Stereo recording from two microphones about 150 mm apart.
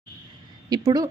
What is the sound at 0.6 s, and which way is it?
Speech, 25° right (ahead or behind).